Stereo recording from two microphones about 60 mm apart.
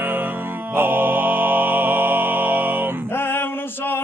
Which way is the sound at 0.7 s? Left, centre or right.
Right.